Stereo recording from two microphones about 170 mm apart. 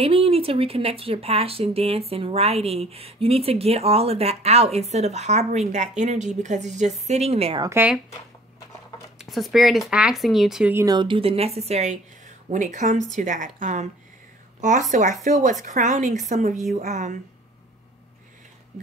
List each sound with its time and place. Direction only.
0.0 s speech: 35° right (ahead or behind)
7.6 s speech: 15° right (ahead or behind)
9.2 s speech: centre (ahead or behind)
10.7 s speech: 15° right (ahead or behind)
11.0 s a woman's voice: 30° right (ahead or behind)